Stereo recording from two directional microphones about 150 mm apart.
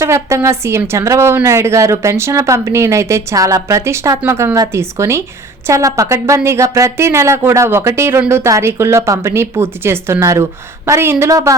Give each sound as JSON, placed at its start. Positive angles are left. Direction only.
{"t": 0.0, "sound": "a woman's voice", "side_deg": -20}